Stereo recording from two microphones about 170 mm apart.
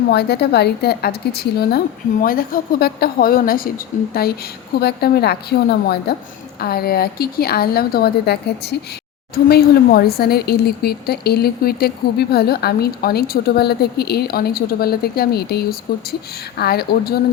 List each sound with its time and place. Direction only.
0.1 s a woman's voice: 75° left (ahead or behind)